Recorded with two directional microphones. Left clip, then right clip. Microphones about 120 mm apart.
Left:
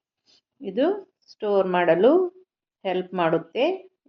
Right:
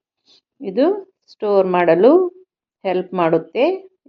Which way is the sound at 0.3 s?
30° right (ahead or behind).